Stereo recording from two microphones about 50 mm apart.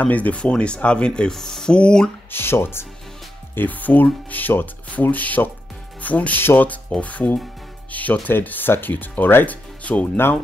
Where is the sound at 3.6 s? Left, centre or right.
Left.